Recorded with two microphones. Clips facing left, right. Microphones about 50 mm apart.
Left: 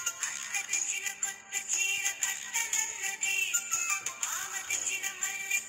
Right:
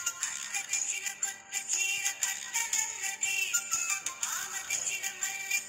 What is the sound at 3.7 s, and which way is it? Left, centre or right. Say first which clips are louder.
Music: left 2 dB; left.